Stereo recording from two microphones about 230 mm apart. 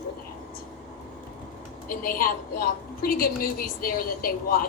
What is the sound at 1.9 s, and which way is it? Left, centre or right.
A woman's voice, left.